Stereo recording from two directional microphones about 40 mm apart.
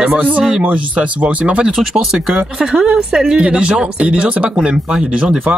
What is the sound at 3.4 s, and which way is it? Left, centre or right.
Speech, right.